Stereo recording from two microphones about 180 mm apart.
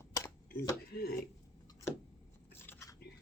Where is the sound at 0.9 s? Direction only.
60° left (ahead or behind).